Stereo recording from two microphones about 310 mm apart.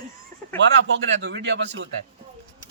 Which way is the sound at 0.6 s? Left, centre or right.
Right.